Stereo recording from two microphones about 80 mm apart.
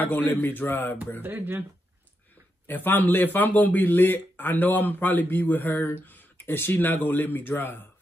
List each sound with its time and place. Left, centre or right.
0.0 s a man's voice: left
1.2 s speech: right
2.6 s a man's voice: left